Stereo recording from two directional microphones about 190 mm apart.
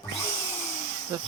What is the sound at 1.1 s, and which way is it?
Speech, 15° right (ahead or behind).